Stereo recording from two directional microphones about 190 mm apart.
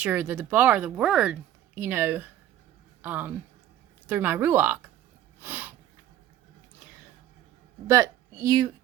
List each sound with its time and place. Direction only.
0.0 s speech: 10° right (ahead or behind)
5.4 s snort: 10° right (ahead or behind)
7.9 s a woman's voice: 15° right (ahead or behind)